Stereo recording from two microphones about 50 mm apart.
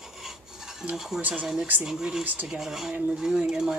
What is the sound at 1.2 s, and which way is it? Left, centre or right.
Speech, right.